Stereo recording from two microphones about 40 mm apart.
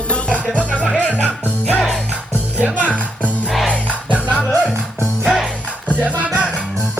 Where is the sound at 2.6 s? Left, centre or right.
Right.